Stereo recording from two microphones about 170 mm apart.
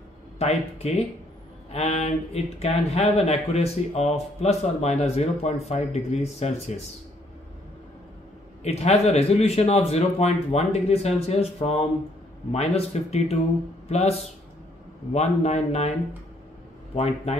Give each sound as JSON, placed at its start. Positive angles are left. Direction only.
{"t": 0.4, "sound": "speech", "side_deg": 40}
{"t": 8.6, "sound": "speech", "side_deg": 40}
{"t": 16.9, "sound": "speech", "side_deg": 40}